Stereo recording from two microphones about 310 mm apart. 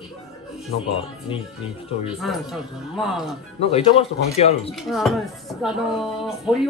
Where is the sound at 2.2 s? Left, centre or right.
Centre.